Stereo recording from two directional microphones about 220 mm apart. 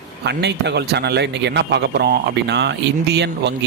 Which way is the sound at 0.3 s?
50° right (ahead or behind).